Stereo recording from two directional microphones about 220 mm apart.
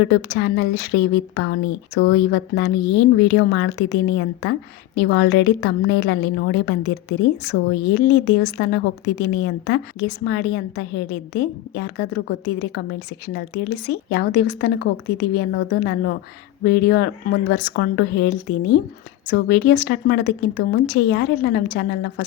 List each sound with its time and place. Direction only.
0.1 s a woman's voice: 50° left (ahead or behind)